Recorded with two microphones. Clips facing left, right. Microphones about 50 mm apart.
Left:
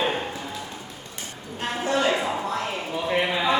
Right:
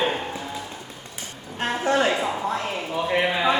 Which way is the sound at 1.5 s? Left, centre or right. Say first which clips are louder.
Right 3 dB; right.